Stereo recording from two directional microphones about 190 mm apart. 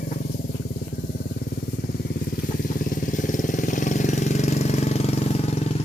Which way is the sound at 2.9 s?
45° left (ahead or behind).